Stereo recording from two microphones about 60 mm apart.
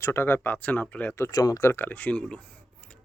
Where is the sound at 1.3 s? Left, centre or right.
Left.